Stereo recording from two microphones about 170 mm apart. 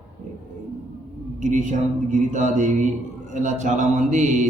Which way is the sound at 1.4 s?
45° right (ahead or behind).